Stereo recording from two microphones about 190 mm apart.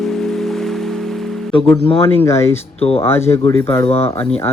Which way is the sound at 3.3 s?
15° left (ahead or behind).